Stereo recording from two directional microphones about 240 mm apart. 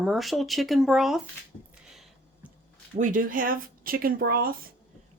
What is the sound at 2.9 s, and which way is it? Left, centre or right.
Speech, right.